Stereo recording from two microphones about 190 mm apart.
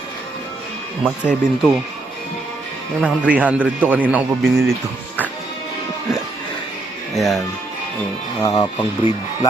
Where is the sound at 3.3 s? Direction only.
5° right (ahead or behind).